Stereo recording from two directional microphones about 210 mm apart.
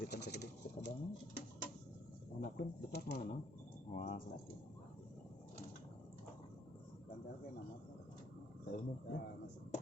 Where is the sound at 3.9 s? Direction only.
40° left (ahead or behind).